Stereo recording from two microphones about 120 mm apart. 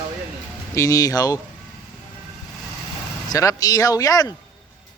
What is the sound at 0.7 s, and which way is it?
Speech, 30° left (ahead or behind).